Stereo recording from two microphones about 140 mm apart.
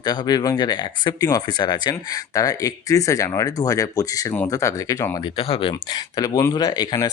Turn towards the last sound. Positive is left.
turn(degrees=30)  # may be behind; listen again after turning